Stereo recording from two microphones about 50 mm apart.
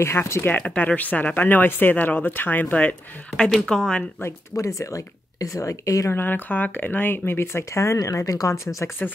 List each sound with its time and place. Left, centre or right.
0.0 s speech: left
0.7 s speech: left
3.6 s speech: centre
4.2 s speech: left
6.1 s speech: left
9.0 s speech: left